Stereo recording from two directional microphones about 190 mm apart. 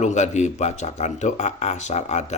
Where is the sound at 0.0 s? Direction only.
40° left (ahead or behind).